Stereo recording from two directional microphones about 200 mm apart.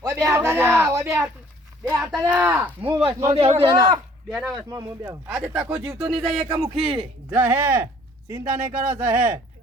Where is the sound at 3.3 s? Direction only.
30° right (ahead or behind).